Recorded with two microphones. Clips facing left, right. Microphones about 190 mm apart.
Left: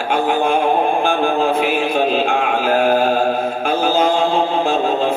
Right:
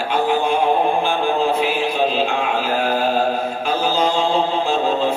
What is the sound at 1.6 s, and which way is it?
Music, 55° left (ahead or behind).